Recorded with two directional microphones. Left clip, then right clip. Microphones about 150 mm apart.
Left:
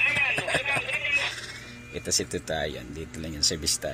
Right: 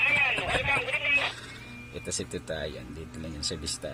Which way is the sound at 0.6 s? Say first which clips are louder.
Even; 20° right (ahead or behind).